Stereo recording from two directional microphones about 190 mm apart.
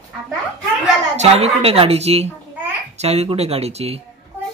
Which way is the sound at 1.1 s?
35° right (ahead or behind).